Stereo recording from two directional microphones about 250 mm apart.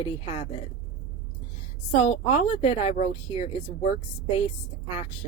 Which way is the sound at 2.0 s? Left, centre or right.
Left.